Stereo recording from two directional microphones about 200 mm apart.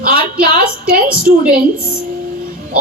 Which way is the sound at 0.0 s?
45° right (ahead or behind).